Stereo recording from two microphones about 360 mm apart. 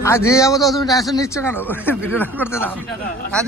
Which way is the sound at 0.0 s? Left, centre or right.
Centre.